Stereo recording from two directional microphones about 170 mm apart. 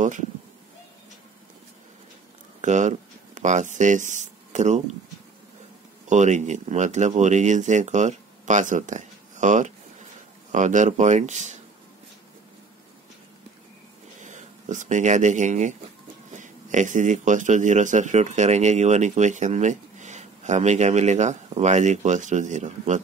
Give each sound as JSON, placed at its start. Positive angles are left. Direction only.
{"t": 2.6, "sound": "speech", "side_deg": -45}
{"t": 6.0, "sound": "a man's voice", "side_deg": -45}
{"t": 14.2, "sound": "a man's voice", "side_deg": -45}